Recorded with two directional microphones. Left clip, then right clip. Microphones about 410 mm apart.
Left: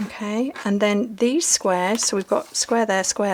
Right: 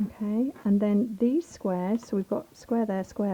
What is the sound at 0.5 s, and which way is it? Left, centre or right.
Speech, centre.